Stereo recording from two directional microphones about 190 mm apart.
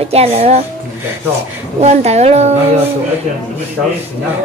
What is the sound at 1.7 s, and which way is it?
Speech, 35° right (ahead or behind).